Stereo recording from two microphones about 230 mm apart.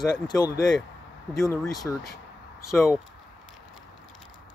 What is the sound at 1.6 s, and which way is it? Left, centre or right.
Speech, centre.